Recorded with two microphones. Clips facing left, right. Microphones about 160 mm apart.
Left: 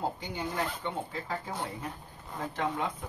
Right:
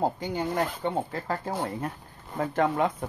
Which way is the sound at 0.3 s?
45° right (ahead or behind).